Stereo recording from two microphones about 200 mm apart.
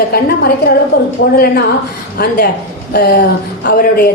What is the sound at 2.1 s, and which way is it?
A woman's voice, 50° left (ahead or behind).